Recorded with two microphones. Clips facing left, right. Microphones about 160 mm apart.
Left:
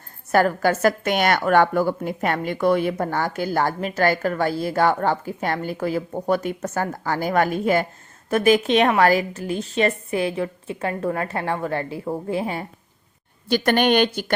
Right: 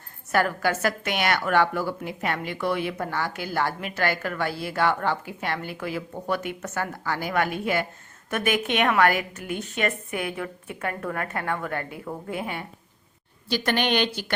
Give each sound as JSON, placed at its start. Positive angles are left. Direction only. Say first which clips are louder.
{"t": 0.3, "sound": "a woman's voice", "louder": "left 5 dB", "side_deg": 40}
{"t": 13.5, "sound": "a woman's voice", "louder": "left 6 dB", "side_deg": 50}